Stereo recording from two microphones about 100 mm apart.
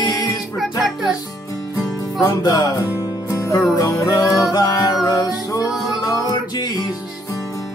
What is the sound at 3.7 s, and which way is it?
Music, 40° left (ahead or behind).